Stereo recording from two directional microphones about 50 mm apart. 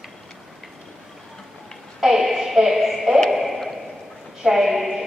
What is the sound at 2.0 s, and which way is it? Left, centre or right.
A woman's voice, centre.